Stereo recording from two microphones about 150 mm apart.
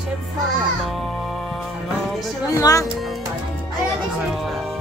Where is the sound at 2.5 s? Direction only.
20° left (ahead or behind).